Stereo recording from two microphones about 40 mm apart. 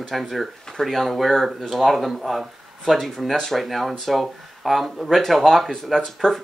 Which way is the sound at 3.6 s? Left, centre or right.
Centre.